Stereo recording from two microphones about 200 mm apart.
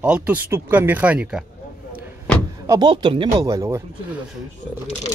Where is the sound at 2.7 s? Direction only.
20° right (ahead or behind).